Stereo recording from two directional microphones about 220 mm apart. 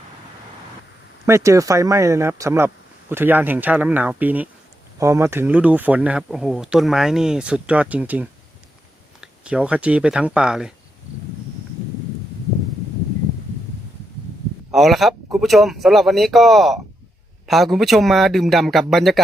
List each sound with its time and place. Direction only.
1.2 s speech: 15° right (ahead or behind)
14.7 s speech: centre (ahead or behind)